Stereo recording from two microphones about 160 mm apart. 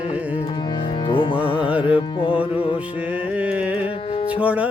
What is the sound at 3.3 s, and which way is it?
Music, 10° right (ahead or behind).